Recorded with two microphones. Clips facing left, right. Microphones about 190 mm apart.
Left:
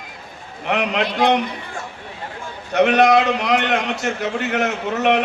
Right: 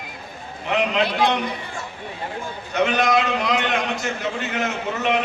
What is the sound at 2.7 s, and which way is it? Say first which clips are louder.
A man's voice: left 6 dB; 70° left (ahead or behind).